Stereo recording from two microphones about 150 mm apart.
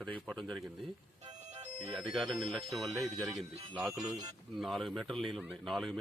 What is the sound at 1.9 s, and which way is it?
Speech, centre (ahead or behind).